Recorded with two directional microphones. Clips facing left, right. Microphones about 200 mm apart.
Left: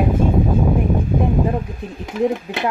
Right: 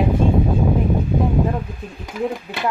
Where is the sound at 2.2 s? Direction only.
20° left (ahead or behind).